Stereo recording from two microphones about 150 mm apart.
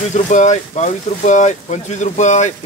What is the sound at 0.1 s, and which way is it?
Speech, 55° left (ahead or behind).